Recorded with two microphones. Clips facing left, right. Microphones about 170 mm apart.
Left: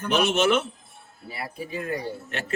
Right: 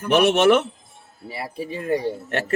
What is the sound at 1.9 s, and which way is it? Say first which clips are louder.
Speech: right 8 dB; 60° right (ahead or behind).